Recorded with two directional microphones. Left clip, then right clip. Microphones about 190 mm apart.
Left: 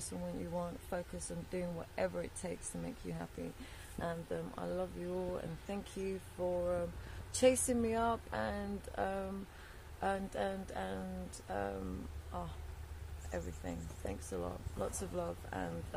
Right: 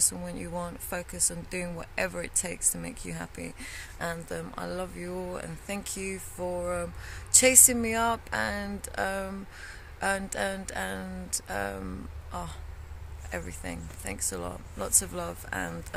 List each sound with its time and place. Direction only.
0.6 s speech: 15° right (ahead or behind)
13.3 s speech: 15° right (ahead or behind)